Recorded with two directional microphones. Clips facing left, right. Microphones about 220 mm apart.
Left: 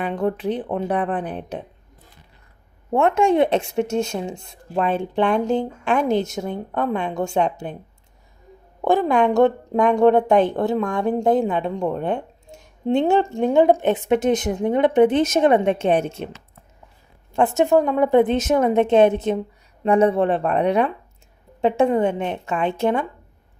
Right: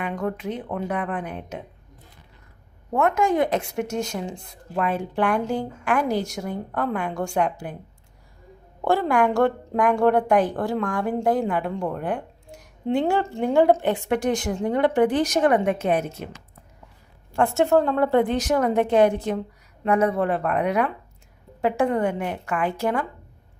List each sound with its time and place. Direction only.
0.0 s speech: 30° left (ahead or behind)
2.9 s speech: 25° left (ahead or behind)
8.8 s speech: 20° left (ahead or behind)
17.3 s speech: 20° left (ahead or behind)